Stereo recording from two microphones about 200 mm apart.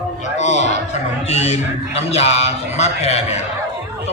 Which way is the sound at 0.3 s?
35° left (ahead or behind).